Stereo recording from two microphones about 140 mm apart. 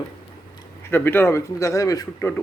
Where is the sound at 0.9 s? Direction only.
15° left (ahead or behind).